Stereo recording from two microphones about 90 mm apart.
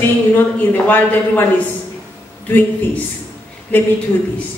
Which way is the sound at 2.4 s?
20° left (ahead or behind).